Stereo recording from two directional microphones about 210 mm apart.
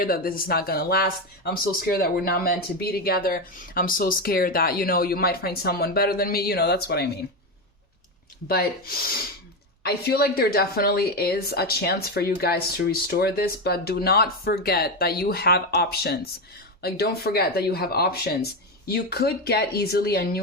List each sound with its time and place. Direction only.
0.0 s speech: 45° left (ahead or behind)
9.8 s speech: 50° left (ahead or behind)